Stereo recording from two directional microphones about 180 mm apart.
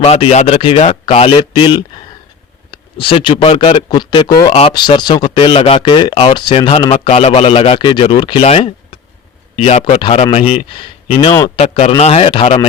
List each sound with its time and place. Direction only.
0.0 s speech: 35° left (ahead or behind)